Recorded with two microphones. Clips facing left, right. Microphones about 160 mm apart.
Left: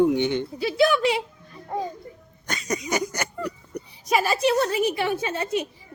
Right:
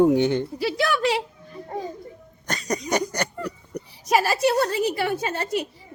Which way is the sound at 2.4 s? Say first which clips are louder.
Right 1 dB; 40° right (ahead or behind).